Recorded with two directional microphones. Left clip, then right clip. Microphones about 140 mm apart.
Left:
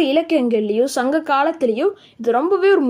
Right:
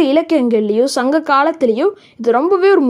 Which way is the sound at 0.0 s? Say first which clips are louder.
Right 4 dB; 30° right (ahead or behind).